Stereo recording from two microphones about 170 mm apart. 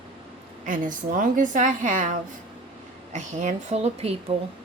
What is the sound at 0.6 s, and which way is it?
Speech, 50° right (ahead or behind).